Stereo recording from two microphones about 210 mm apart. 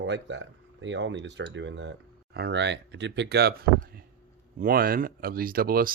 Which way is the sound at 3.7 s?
45° right (ahead or behind).